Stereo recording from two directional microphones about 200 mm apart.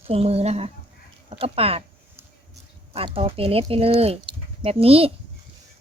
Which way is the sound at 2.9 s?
30° right (ahead or behind).